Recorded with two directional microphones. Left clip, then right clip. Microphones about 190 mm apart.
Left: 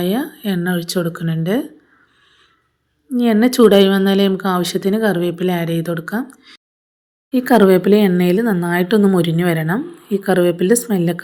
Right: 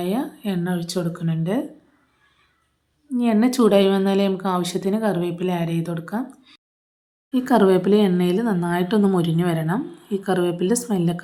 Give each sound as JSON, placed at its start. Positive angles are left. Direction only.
{"t": 0.0, "sound": "speech", "side_deg": 20}
{"t": 3.2, "sound": "a woman's voice", "side_deg": 20}